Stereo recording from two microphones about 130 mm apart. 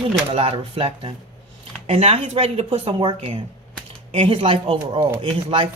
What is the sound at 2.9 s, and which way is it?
Speech, 40° right (ahead or behind).